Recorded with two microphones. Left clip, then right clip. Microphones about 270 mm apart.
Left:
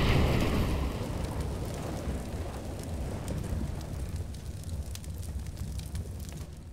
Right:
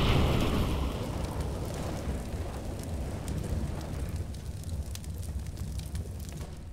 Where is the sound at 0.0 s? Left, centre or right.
Centre.